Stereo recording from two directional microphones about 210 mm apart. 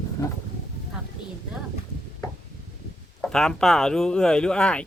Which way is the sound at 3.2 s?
Centre (ahead or behind).